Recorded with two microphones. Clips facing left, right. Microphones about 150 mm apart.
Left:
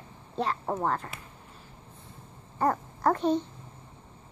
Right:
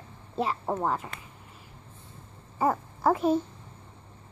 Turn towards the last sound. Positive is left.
turn(degrees=-5)  # may be behind; listen again after turning